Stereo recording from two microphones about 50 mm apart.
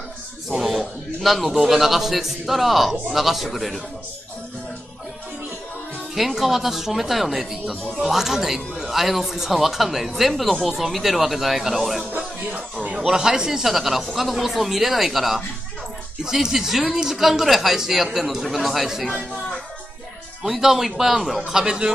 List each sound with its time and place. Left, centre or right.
0.5 s speech: centre
6.1 s speech: centre
12.2 s music: centre
13.0 s speech: centre
20.4 s speech: centre
21.5 s a man's voice: centre